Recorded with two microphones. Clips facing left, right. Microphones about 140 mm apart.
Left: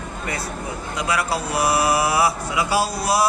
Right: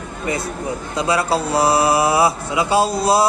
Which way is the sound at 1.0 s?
25° right (ahead or behind).